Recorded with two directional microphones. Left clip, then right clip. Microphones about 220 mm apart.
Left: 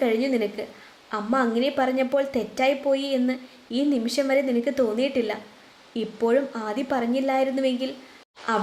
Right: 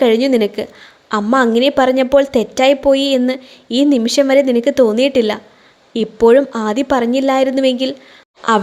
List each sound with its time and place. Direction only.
0.0 s a woman's voice: 40° right (ahead or behind)